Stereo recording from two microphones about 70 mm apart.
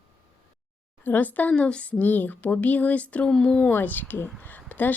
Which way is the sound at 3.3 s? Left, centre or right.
Centre.